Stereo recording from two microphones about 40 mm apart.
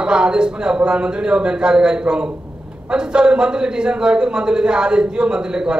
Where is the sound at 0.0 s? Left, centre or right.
Right.